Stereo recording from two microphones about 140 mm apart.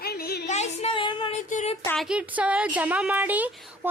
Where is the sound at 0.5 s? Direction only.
50° left (ahead or behind).